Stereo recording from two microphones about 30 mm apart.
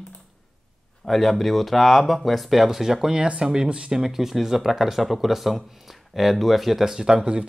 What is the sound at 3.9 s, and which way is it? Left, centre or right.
Speech, centre.